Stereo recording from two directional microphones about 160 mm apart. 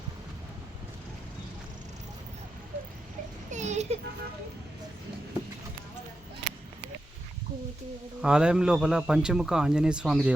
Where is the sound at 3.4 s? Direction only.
45° right (ahead or behind).